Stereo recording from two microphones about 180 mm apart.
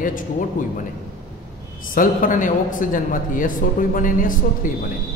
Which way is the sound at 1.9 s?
45° left (ahead or behind).